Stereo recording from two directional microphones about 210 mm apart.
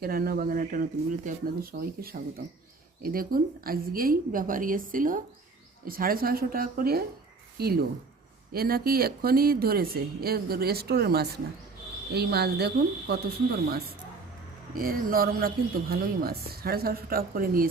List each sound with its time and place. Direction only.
0.0 s a woman's voice: 45° right (ahead or behind)